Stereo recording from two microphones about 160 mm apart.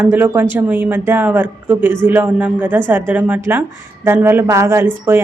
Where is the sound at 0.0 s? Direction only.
10° right (ahead or behind).